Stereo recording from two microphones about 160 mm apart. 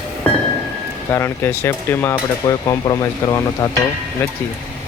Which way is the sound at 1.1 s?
15° left (ahead or behind).